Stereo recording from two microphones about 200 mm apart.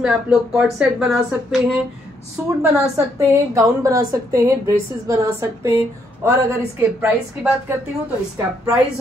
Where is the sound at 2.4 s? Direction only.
10° right (ahead or behind).